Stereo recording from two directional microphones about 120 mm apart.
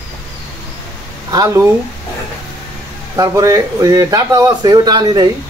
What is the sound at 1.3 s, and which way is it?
Speech, 30° right (ahead or behind).